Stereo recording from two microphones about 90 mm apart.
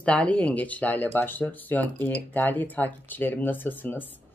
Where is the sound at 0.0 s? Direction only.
15° left (ahead or behind).